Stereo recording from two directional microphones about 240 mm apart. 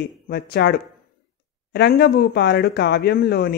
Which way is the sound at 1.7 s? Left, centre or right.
Left.